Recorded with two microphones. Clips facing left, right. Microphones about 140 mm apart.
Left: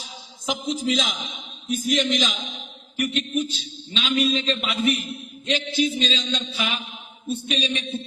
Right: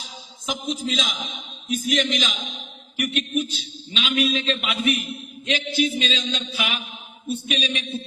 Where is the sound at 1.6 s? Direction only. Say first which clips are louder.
Left 1 dB; centre (ahead or behind).